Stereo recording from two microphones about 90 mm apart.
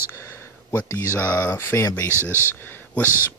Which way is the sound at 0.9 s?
30° left (ahead or behind).